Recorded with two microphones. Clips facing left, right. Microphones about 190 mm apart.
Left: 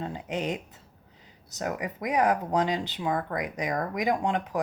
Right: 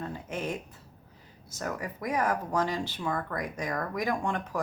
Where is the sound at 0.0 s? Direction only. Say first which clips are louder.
Left 3 dB; 20° left (ahead or behind).